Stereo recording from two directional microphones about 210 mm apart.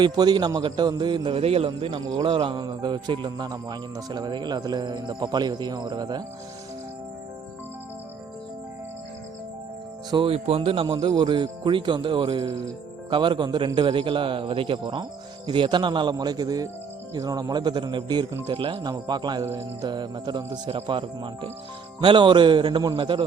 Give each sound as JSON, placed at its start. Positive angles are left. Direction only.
{"t": 0.0, "sound": "a man's voice", "side_deg": -20}
{"t": 10.1, "sound": "a man's voice", "side_deg": -25}